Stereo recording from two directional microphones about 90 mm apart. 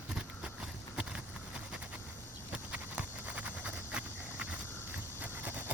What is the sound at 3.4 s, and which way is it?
Vehicle, 15° right (ahead or behind).